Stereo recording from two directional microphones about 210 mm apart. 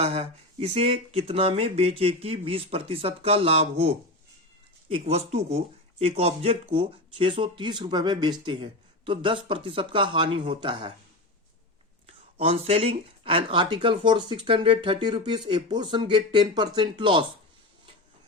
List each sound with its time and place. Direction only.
0.0 s speech: 30° right (ahead or behind)
12.4 s speech: 25° right (ahead or behind)